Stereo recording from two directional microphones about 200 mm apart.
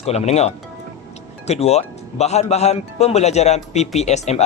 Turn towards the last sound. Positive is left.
turn(degrees=35)  # may be behind; listen again after turning